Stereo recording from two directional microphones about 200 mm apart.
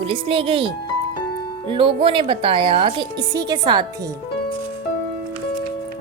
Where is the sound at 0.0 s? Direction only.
25° right (ahead or behind).